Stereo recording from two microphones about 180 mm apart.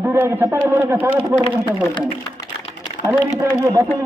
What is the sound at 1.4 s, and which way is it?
Speech, 30° left (ahead or behind).